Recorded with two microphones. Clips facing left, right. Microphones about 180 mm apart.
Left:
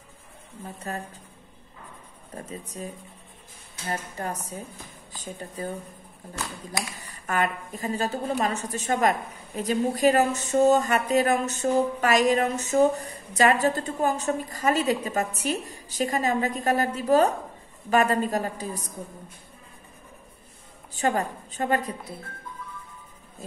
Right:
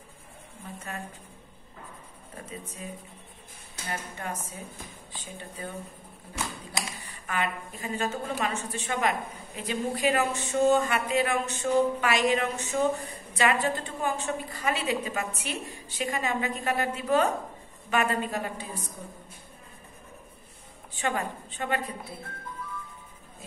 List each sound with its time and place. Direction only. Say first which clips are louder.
0.9 s speech: left 4 dB; 35° left (ahead or behind)
2.4 s speech: left 4 dB; 35° left (ahead or behind)
3.9 s speech: left 4 dB; 40° left (ahead or behind)
7.0 s speech: left 6 dB; 45° left (ahead or behind)
20.9 s a woman's voice: left 5 dB; 40° left (ahead or behind)